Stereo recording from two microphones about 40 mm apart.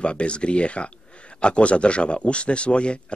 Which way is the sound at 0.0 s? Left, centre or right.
Left.